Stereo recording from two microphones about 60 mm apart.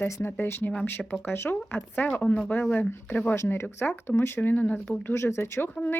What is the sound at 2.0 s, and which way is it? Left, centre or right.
Speech, left.